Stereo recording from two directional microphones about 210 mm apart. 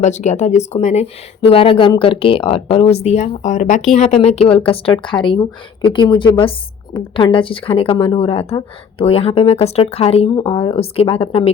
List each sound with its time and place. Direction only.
0.0 s a woman's voice: 35° left (ahead or behind)